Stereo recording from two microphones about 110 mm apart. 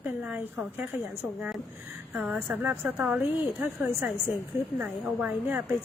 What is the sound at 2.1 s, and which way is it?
A woman's voice, 15° right (ahead or behind).